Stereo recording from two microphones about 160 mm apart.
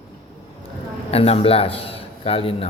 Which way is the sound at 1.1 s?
40° left (ahead or behind).